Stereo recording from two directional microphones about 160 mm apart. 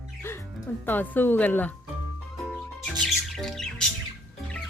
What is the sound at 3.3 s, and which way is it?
Squawk, 5° left (ahead or behind).